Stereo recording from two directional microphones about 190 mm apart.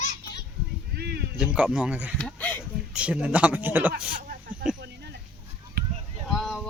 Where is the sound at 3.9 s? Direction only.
50° right (ahead or behind).